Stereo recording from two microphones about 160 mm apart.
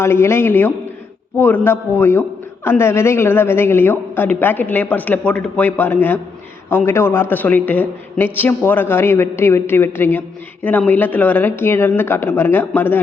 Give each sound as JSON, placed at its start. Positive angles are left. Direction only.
{"t": 0.0, "sound": "a man's voice", "side_deg": 15}